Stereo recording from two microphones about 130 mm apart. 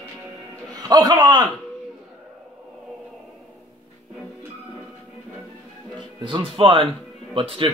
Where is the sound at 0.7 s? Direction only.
30° right (ahead or behind).